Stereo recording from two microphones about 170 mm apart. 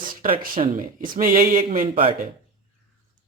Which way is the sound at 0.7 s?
50° right (ahead or behind).